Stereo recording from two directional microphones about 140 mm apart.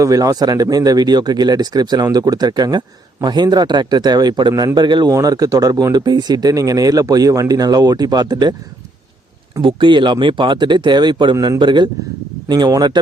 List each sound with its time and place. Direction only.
0.0 s a man's voice: 25° right (ahead or behind)
9.6 s speech: 35° right (ahead or behind)